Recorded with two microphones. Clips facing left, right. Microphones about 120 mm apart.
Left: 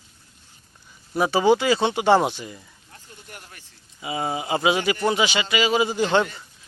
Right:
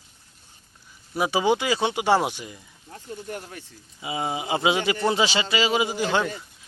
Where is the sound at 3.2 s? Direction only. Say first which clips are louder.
Right 9 dB; 30° right (ahead or behind).